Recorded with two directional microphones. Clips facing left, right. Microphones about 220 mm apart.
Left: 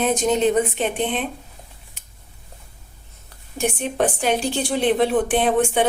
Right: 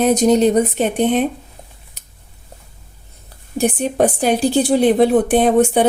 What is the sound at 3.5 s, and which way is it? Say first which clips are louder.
A woman's voice: right 6 dB; 40° right (ahead or behind).